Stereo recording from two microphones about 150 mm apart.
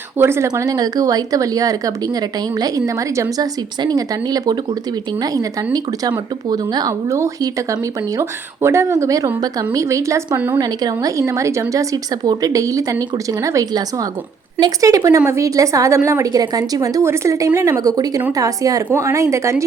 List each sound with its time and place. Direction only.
0.2 s a woman's voice: 15° right (ahead or behind)
10.6 s a woman's voice: 25° right (ahead or behind)